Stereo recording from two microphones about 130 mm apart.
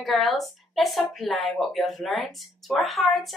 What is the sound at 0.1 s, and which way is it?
A woman's voice, centre (ahead or behind).